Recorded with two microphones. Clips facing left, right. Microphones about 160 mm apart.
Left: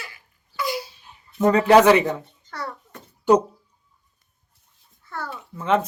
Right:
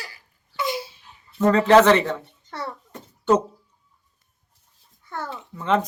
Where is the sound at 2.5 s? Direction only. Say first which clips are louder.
Right 1 dB; 25° right (ahead or behind).